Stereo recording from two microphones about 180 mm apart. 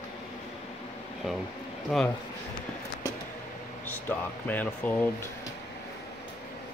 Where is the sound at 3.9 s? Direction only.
10° left (ahead or behind).